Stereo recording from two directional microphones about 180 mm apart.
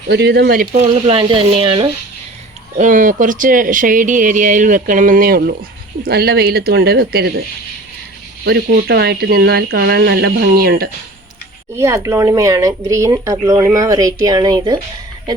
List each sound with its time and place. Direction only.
0.1 s speech: 70° right (ahead or behind)
1.0 s speech: 30° right (ahead or behind)
2.7 s speech: 45° right (ahead or behind); by 7.4 s 60° right (ahead or behind)
8.4 s speech: 65° right (ahead or behind)
11.8 s speech: 15° right (ahead or behind)